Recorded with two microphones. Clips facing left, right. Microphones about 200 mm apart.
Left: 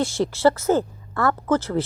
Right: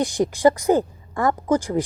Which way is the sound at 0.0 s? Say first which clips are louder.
Right 2 dB; 15° right (ahead or behind).